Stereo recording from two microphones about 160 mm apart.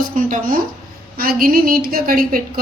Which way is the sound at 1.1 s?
70° right (ahead or behind).